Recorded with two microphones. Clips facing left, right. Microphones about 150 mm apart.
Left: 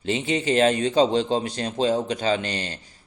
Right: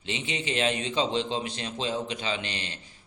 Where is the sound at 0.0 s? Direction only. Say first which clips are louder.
Left 9 dB; 45° left (ahead or behind).